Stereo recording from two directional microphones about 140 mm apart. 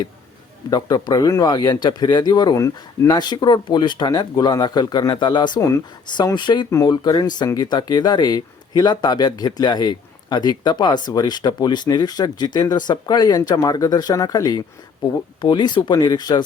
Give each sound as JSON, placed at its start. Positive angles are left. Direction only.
{"t": 0.7, "sound": "speech", "side_deg": 30}